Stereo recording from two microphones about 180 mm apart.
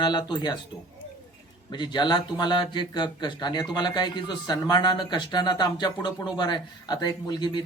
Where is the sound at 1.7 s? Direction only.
25° left (ahead or behind).